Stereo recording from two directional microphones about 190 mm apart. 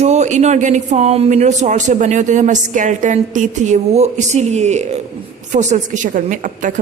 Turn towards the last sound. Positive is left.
turn(degrees=-45)  # may be behind; listen again after turning